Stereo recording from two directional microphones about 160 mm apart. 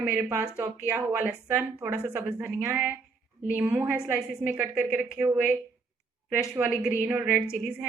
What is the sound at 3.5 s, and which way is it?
A woman's voice, 10° right (ahead or behind).